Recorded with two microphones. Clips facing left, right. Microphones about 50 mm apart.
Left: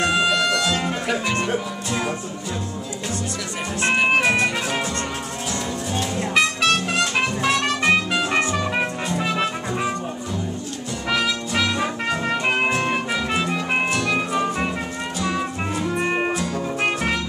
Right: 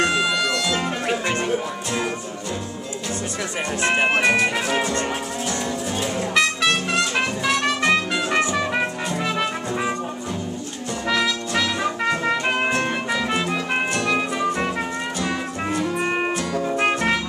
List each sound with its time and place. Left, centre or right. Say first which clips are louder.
0.0 s music: left 1 dB; centre
1.0 s music: even; right
1.9 s music: left 1 dB; centre
3.8 s music: left 1 dB; right
4.2 s music: right 1 dB; centre
4.7 s music: right 3 dB; right
6.9 s music: even; centre
11.1 s music: even; centre